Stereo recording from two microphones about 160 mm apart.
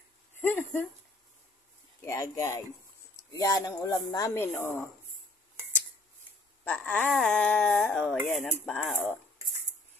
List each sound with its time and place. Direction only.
0.4 s speech: 15° left (ahead or behind)
2.0 s speech: 15° left (ahead or behind)
6.6 s speech: 5° left (ahead or behind)